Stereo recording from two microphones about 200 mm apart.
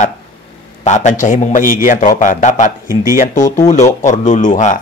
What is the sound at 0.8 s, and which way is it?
A man's voice, 35° left (ahead or behind).